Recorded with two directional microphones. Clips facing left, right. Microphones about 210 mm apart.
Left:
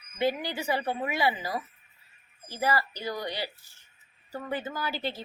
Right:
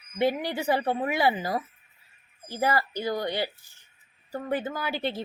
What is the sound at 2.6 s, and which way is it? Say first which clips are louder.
A woman's voice: right 2 dB; 50° right (ahead or behind).